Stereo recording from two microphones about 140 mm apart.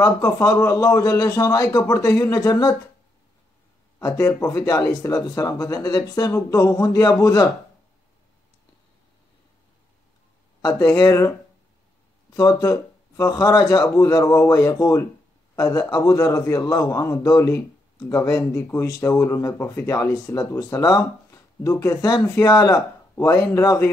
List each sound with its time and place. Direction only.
0.0 s a man's voice: 25° left (ahead or behind)
4.0 s a man's voice: 20° left (ahead or behind)
10.6 s a man's voice: 20° left (ahead or behind)
12.4 s a man's voice: 25° left (ahead or behind)